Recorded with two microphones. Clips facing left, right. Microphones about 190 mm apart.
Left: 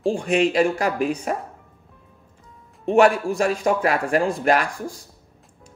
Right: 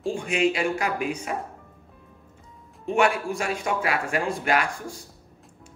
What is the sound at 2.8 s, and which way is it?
A man's voice, 40° left (ahead or behind).